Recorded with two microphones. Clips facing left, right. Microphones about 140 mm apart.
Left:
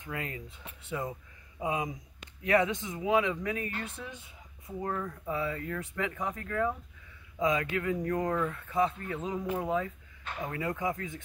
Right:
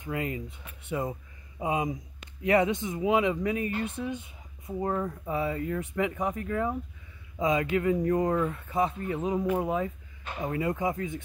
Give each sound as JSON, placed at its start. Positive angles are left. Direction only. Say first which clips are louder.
{"t": 0.0, "sound": "speech", "louder": "right 6 dB", "side_deg": -20}
{"t": 2.4, "sound": "speech", "louder": "right 3 dB", "side_deg": -20}